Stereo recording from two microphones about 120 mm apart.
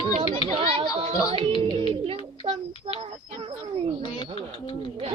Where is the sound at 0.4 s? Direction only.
50° right (ahead or behind).